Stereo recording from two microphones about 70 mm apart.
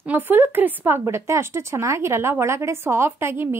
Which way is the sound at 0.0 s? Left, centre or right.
Right.